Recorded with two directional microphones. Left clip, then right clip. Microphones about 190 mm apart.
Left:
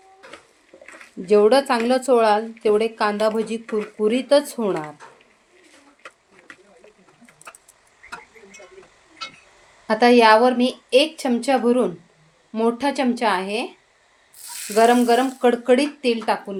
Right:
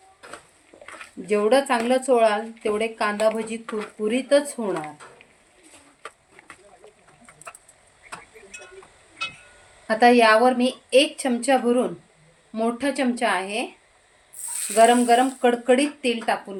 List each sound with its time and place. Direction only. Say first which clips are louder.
1.3 s speech: left 4 dB; 25° left (ahead or behind)
9.8 s speech: left 2 dB; 25° left (ahead or behind)
14.8 s speech: even; 25° left (ahead or behind)